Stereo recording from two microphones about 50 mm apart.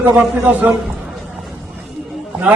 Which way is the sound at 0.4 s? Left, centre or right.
Right.